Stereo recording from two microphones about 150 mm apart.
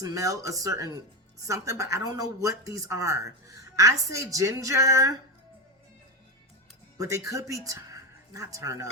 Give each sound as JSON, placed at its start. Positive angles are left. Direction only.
{"t": 0.0, "sound": "speech", "side_deg": -20}
{"t": 7.3, "sound": "speech", "side_deg": -20}